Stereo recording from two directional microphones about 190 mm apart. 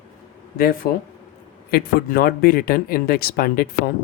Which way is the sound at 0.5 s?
50° left (ahead or behind).